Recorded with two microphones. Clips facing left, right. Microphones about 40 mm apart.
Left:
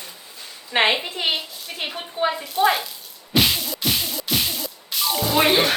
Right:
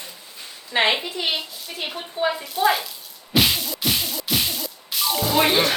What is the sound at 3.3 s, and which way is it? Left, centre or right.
Whip, centre.